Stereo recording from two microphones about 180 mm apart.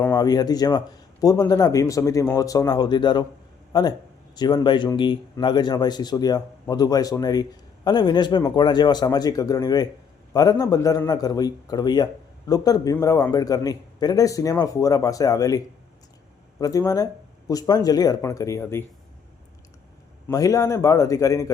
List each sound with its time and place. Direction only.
0.1 s a man's voice: 20° left (ahead or behind)
20.2 s a man's voice: 20° left (ahead or behind)